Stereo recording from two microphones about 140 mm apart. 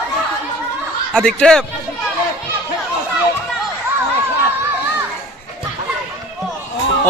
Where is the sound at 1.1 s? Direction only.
5° left (ahead or behind).